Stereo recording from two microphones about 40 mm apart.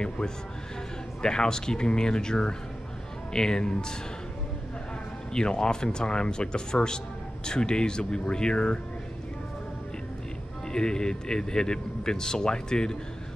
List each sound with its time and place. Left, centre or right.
1.2 s a man's voice: centre
5.3 s speech: centre
10.7 s a man's voice: centre